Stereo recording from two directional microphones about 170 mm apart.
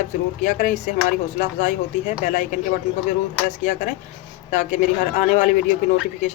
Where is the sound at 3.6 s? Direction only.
50° left (ahead or behind).